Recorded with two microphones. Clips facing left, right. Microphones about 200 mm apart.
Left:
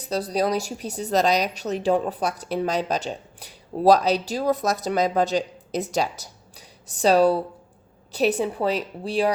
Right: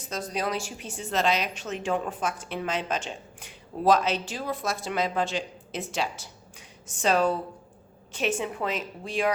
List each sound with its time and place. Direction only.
0.0 s a woman's voice: 35° left (ahead or behind)